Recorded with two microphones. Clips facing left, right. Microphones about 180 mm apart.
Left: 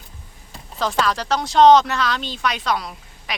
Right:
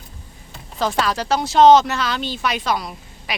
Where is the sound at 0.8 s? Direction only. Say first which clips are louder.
Right 1 dB; 5° right (ahead or behind).